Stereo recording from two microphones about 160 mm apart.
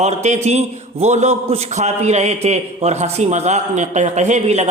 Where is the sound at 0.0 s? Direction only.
45° right (ahead or behind).